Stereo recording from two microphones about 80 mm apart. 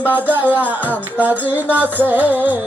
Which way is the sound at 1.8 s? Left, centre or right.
Right.